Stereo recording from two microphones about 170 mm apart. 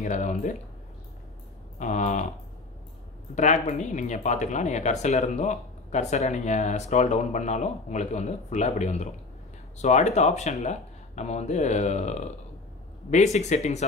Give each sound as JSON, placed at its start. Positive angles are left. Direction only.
{"t": 0.0, "sound": "speech", "side_deg": 45}
{"t": 1.8, "sound": "speech", "side_deg": 45}
{"t": 3.3, "sound": "speech", "side_deg": 45}